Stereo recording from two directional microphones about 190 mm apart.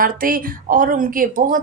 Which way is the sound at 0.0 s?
50° right (ahead or behind).